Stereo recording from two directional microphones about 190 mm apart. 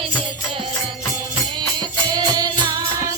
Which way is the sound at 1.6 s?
20° right (ahead or behind).